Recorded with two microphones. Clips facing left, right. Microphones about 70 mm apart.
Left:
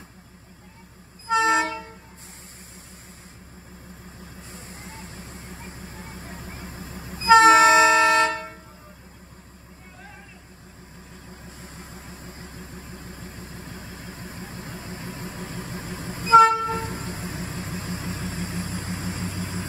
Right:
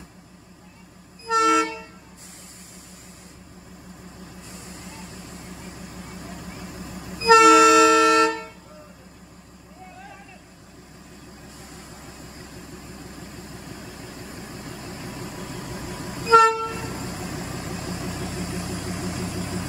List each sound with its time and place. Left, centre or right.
1.2 s harmonica: left
4.4 s vehicle: left
11.6 s vehicle: left